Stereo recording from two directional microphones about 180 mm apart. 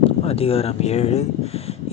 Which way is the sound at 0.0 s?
30° left (ahead or behind).